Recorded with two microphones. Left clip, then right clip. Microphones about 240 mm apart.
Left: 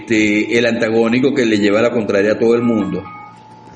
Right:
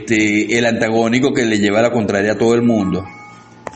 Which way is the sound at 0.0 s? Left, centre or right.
Right.